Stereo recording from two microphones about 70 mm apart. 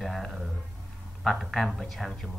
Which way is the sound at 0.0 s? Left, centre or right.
Centre.